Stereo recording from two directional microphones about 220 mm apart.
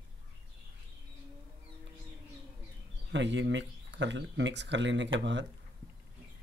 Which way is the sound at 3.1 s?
55° right (ahead or behind).